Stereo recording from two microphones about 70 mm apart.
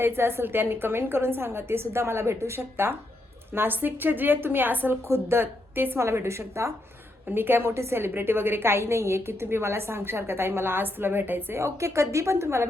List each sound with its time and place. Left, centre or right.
0.0 s a woman's voice: right
7.3 s a woman's voice: right
11.6 s a woman's voice: right